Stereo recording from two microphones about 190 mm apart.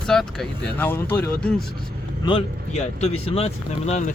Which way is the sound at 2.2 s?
25° left (ahead or behind).